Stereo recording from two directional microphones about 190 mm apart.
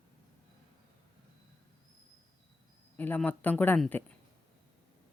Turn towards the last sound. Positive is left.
turn(degrees=10)  # may be behind; listen again after turning